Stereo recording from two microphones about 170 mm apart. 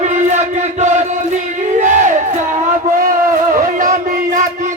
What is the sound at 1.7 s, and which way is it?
Battle cry, 45° right (ahead or behind).